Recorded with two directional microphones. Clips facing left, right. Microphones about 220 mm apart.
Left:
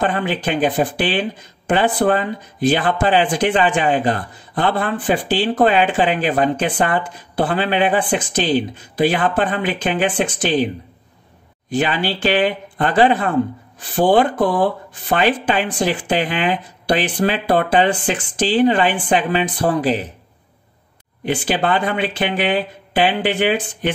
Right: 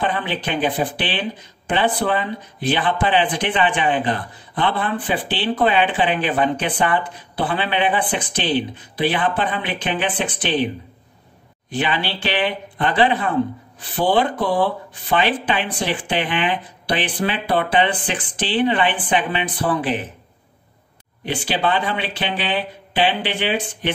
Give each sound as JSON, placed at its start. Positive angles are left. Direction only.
{"t": 0.0, "sound": "speech", "side_deg": 45}
{"t": 11.7, "sound": "speech", "side_deg": 45}
{"t": 21.5, "sound": "speech", "side_deg": 50}